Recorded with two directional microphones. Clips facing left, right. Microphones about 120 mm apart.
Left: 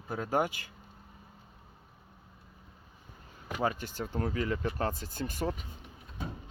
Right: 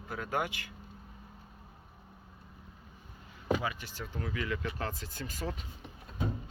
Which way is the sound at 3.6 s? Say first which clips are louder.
Left 5 dB; 45° left (ahead or behind).